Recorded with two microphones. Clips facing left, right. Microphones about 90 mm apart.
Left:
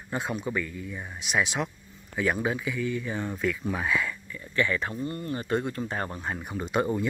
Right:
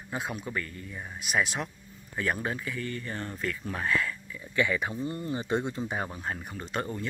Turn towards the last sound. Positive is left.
turn(degrees=15)  # may be behind; listen again after turning